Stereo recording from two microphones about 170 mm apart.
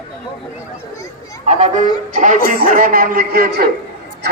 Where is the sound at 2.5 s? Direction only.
55° right (ahead or behind).